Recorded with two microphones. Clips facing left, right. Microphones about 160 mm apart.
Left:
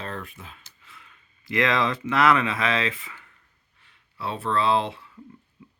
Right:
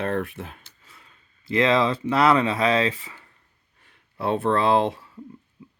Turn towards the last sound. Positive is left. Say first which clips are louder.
# right 3 dB
turn(degrees=-45)  # may be behind; listen again after turning